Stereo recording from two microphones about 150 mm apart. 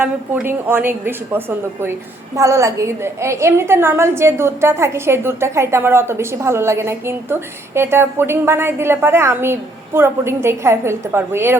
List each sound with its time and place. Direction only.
0.0 s a woman's voice: 10° right (ahead or behind)